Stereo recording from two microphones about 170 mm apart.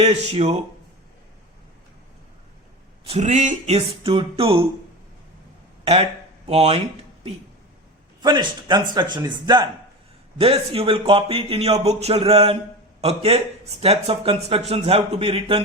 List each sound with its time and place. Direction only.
0.0 s speech: 40° right (ahead or behind)
3.1 s speech: 40° right (ahead or behind)
5.8 s speech: 35° right (ahead or behind)
8.2 s a man's voice: 25° right (ahead or behind)